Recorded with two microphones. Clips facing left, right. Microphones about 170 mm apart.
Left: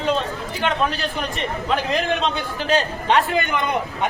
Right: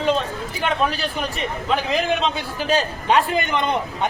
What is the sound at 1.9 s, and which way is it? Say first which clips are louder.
A man's voice: even; centre (ahead or behind).